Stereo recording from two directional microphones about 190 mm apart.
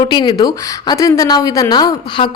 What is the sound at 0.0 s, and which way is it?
A woman's voice, 25° left (ahead or behind).